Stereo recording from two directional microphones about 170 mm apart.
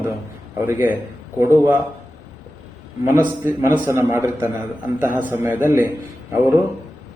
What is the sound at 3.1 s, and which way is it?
A man's voice, 15° right (ahead or behind).